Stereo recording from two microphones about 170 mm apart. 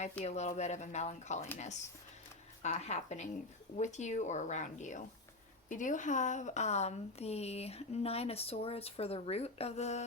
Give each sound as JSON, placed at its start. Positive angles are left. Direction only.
{"t": 0.3, "sound": "speech", "side_deg": 40}